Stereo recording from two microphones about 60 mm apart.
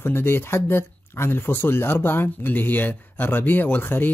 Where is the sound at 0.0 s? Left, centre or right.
Left.